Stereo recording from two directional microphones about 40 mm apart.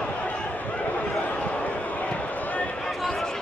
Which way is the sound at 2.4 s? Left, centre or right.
Left.